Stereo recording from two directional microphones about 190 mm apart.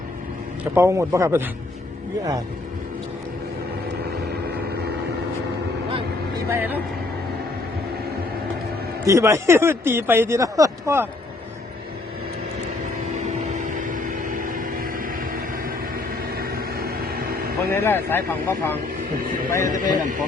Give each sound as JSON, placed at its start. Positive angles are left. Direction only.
{"t": 0.8, "sound": "speech", "side_deg": -15}
{"t": 6.5, "sound": "speech", "side_deg": -10}
{"t": 9.0, "sound": "speech", "side_deg": -15}
{"t": 13.1, "sound": "vehicle", "side_deg": -40}
{"t": 17.7, "sound": "speech", "side_deg": 10}
{"t": 19.6, "sound": "speech", "side_deg": -45}